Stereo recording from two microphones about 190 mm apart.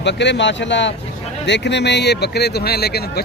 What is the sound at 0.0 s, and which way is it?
Speech, 65° left (ahead or behind).